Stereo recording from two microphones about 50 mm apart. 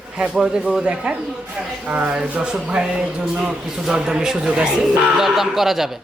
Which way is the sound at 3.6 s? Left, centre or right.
Centre.